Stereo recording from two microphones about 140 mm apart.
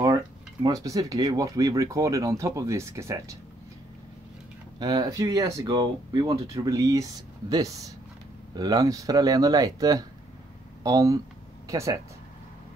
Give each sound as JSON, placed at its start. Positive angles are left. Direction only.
{"t": 0.0, "sound": "speech", "side_deg": -25}
{"t": 4.7, "sound": "speech", "side_deg": -30}